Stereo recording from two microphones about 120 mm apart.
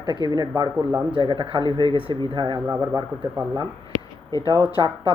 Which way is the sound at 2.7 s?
30° right (ahead or behind).